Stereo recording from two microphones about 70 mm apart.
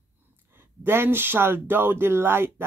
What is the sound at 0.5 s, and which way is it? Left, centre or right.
Speech, right.